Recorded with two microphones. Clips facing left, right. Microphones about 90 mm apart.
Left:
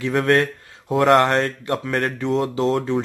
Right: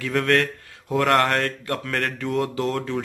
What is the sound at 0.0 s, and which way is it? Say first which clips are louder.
A man's voice: left 3 dB; 25° left (ahead or behind).